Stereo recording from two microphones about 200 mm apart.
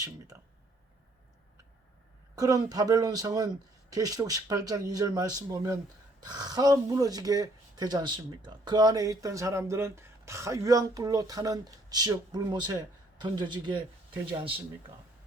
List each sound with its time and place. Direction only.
2.3 s speech: 20° right (ahead or behind)